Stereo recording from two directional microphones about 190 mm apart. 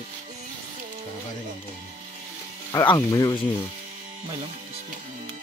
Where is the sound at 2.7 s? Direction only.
20° left (ahead or behind).